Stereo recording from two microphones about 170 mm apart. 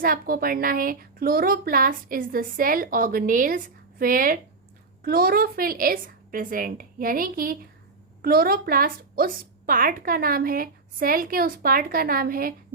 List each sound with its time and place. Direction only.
0.0 s a woman's voice: 60° right (ahead or behind)